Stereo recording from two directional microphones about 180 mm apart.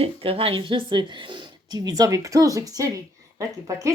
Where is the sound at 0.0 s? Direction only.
30° right (ahead or behind).